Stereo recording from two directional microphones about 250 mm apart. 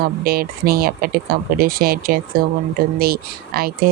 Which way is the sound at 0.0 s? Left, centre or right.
Right.